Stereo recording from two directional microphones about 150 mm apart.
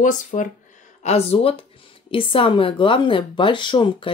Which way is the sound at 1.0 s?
45° left (ahead or behind).